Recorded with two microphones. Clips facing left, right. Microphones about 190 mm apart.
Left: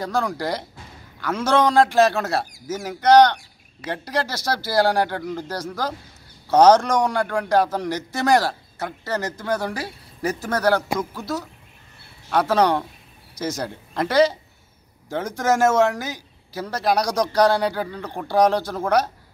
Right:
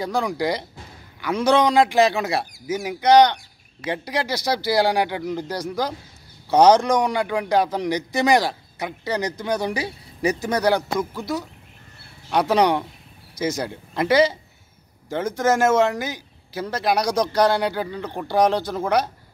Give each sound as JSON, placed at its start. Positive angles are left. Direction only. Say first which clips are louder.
{"t": 0.0, "sound": "a man's voice", "louder": "right 1 dB", "side_deg": -10}
{"t": 15.3, "sound": "speech", "louder": "right 1 dB", "side_deg": 10}
{"t": 15.6, "sound": "a man's voice", "louder": "even", "side_deg": -10}